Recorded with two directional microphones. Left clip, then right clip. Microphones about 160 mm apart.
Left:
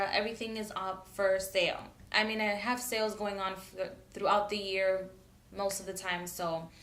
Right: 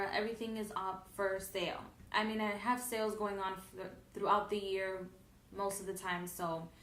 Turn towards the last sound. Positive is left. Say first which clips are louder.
# left 4 dB
turn(degrees=15)  # may be behind; listen again after turning